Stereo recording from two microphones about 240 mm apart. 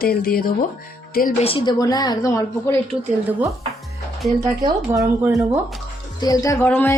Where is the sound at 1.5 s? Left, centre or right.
Left.